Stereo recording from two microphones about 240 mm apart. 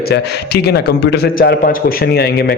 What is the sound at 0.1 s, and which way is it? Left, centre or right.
A man's voice, left.